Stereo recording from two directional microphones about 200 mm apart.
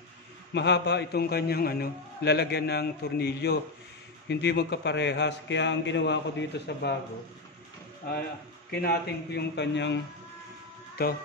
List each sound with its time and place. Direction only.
0.5 s a man's voice: 60° left (ahead or behind)
8.6 s a man's voice: 50° left (ahead or behind)
11.0 s speech: 50° left (ahead or behind)